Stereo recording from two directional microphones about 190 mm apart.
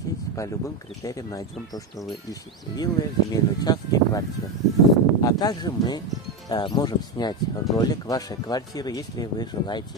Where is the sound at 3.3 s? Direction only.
20° left (ahead or behind).